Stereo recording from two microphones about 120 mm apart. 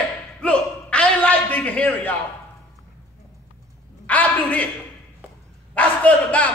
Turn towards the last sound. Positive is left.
turn(degrees=10)  # may be behind; listen again after turning